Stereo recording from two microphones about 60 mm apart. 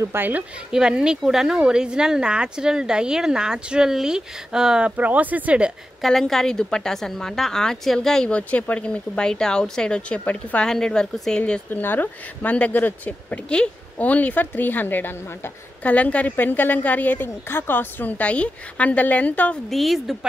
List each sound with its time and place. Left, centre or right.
0.1 s a woman's voice: right
0.7 s a woman's voice: centre
6.0 s a woman's voice: centre
8.3 s a woman's voice: left
11.7 s speech: left
12.4 s speech: left
19.7 s a woman's voice: centre